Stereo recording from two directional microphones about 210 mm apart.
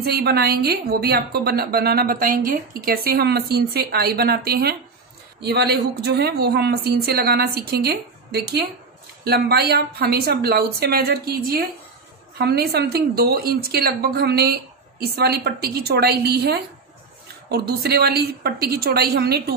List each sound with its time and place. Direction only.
0.0 s a woman's voice: 50° right (ahead or behind)